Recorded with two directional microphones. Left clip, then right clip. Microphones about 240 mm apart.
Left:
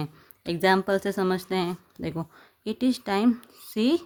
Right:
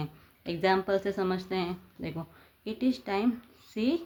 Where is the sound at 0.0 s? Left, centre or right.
Left.